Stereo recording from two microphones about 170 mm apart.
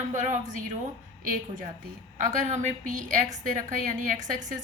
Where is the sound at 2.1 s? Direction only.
50° right (ahead or behind).